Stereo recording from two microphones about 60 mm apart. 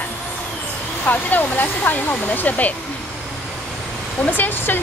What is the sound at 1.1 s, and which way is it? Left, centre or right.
Hair dryer, left.